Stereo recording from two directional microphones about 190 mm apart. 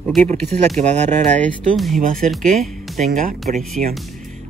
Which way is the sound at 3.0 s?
40° right (ahead or behind).